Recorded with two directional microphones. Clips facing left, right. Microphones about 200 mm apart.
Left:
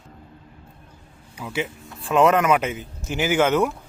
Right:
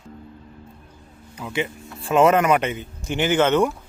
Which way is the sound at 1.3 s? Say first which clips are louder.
Right 1 dB; 5° left (ahead or behind).